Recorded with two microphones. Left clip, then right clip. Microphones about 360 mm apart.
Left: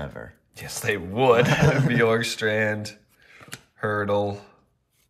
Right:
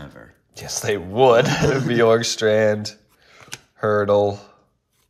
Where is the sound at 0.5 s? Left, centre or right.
Centre.